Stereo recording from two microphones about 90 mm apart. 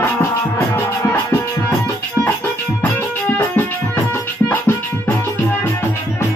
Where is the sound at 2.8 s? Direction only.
20° left (ahead or behind).